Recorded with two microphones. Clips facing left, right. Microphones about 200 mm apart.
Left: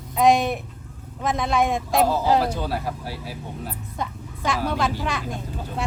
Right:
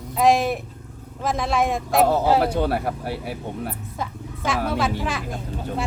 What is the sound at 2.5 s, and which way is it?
Speech, 60° right (ahead or behind).